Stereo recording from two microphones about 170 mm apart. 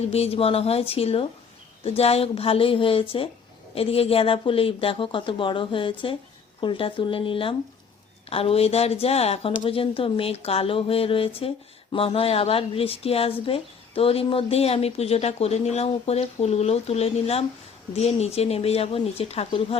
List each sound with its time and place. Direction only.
0.1 s speech: 35° left (ahead or behind)